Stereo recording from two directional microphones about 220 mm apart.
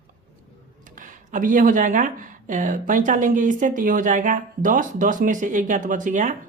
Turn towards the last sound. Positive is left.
turn(degrees=-35)  # may be behind; listen again after turning